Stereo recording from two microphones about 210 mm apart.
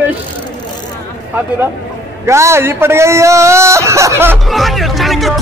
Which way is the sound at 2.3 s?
15° right (ahead or behind).